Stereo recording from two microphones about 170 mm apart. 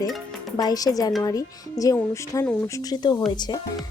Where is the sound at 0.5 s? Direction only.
20° left (ahead or behind).